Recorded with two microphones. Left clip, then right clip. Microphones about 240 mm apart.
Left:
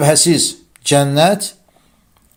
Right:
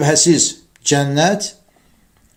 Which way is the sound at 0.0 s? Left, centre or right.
Left.